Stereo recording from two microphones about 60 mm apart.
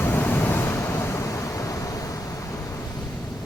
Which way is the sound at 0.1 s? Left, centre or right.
Left.